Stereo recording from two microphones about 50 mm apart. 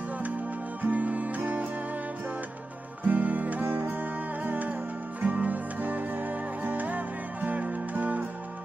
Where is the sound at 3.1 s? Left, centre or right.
Right.